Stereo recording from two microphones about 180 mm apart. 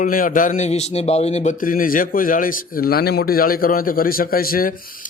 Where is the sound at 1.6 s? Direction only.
50° left (ahead or behind).